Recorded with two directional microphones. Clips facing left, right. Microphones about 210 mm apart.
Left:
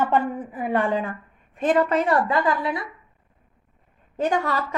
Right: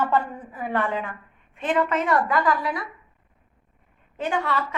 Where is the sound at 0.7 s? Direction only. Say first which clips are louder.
Left 3 dB; 35° left (ahead or behind).